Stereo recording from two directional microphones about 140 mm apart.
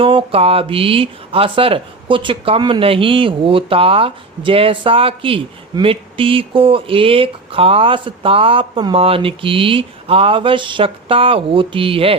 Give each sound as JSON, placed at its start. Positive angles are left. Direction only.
{"t": 0.0, "sound": "speech", "side_deg": -40}